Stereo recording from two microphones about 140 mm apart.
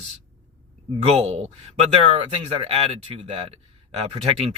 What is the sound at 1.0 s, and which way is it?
Speech, 50° right (ahead or behind).